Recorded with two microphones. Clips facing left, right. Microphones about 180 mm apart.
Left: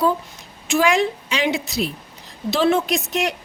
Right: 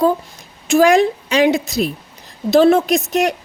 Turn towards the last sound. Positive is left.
turn(degrees=-45)  # may be behind; listen again after turning